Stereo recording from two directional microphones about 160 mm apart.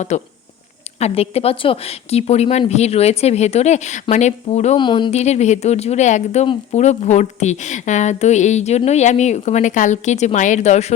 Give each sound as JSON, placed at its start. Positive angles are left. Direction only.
{"t": 0.1, "sound": "a woman's voice", "side_deg": 45}
{"t": 4.8, "sound": "speech", "side_deg": 30}
{"t": 5.1, "sound": "a woman's voice", "side_deg": 45}